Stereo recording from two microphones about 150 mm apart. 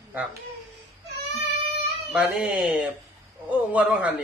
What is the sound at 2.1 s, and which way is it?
Speech, 5° right (ahead or behind).